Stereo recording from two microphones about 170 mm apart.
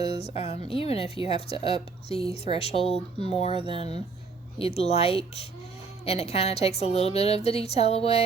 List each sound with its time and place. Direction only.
0.0 s a woman's voice: 35° left (ahead or behind)